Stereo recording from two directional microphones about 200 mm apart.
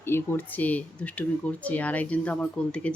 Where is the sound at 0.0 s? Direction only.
10° left (ahead or behind).